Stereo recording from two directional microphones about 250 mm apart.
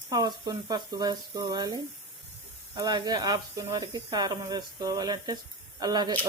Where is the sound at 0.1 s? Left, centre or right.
Centre.